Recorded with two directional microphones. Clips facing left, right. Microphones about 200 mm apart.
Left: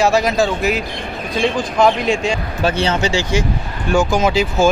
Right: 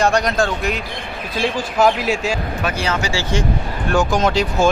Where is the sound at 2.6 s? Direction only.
30° left (ahead or behind); by 3.5 s 10° left (ahead or behind).